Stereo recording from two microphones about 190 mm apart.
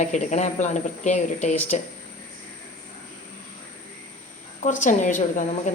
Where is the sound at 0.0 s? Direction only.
40° left (ahead or behind).